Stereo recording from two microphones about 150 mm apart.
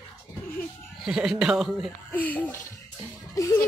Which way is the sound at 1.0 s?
5° right (ahead or behind).